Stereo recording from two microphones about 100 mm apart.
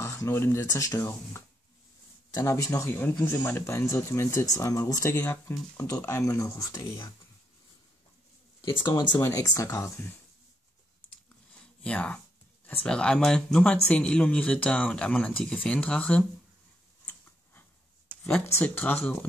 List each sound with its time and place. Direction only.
0.0 s speech: 30° left (ahead or behind)
2.3 s speech: 35° left (ahead or behind)
2.9 s speech: 20° left (ahead or behind)
5.8 s speech: 20° left (ahead or behind); by 7.1 s 35° left (ahead or behind)
8.8 s speech: 50° left (ahead or behind)
9.2 s speech: 30° left (ahead or behind)
11.8 s speech: 15° left (ahead or behind)
17.0 s tick-tock: 20° left (ahead or behind)
18.2 s speech: 15° left (ahead or behind)